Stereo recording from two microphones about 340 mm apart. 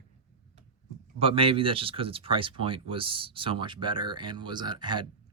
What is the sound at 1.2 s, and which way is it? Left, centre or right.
Speech, centre.